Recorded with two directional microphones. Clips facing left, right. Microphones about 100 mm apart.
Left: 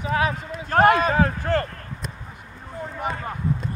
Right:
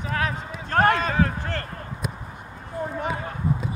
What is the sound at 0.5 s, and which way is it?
Speech, 5° left (ahead or behind).